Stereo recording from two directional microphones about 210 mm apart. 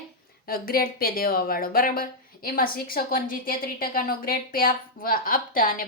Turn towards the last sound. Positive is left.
turn(degrees=40)  # may be behind; listen again after turning